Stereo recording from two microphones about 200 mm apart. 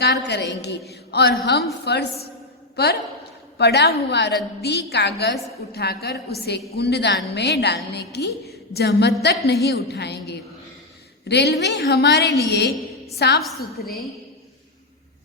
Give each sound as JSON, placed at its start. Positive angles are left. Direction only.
{"t": 0.0, "sound": "a woman's voice", "side_deg": 60}